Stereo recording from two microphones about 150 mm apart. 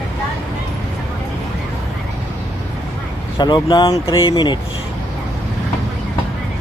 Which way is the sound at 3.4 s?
30° left (ahead or behind).